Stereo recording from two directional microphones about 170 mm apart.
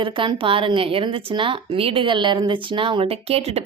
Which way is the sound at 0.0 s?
30° right (ahead or behind).